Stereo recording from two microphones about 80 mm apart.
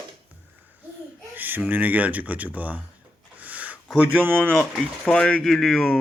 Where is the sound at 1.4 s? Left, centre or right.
Right.